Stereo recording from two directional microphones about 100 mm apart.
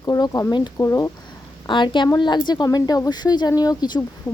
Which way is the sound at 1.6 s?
55° left (ahead or behind).